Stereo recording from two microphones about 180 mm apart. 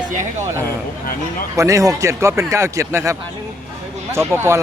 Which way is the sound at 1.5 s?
15° right (ahead or behind).